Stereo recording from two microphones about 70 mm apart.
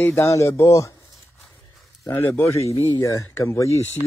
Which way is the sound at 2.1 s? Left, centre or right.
Left.